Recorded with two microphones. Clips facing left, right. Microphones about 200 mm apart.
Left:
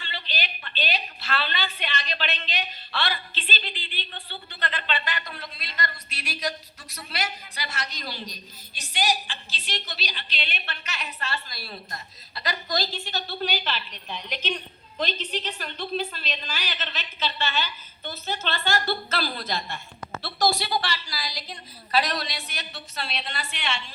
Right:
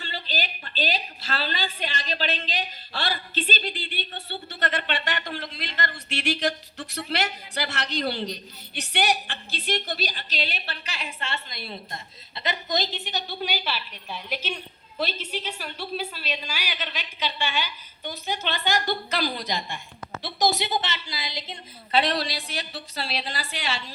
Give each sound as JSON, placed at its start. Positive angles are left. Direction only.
{"t": 0.0, "sound": "a sound", "side_deg": -40}
{"t": 1.3, "sound": "a woman's voice", "side_deg": -40}
{"t": 6.7, "sound": "a man's voice", "side_deg": -70}